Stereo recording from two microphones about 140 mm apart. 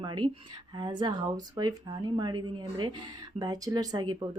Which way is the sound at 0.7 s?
30° right (ahead or behind).